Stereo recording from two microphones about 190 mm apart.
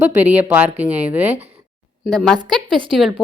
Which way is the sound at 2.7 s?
25° right (ahead or behind).